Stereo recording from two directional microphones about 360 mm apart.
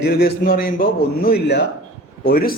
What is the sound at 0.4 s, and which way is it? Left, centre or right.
Speech, left.